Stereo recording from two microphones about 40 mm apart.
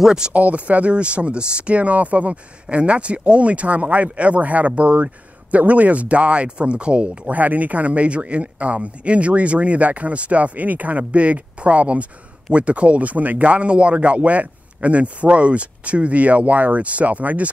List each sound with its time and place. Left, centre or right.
0.0 s speech: centre
0.3 s speech: right